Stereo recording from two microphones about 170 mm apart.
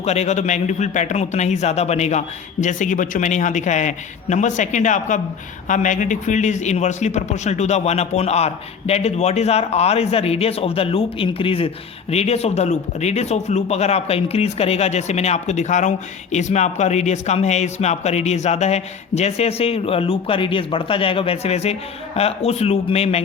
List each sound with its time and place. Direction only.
0.0 s a man's voice: 40° left (ahead or behind)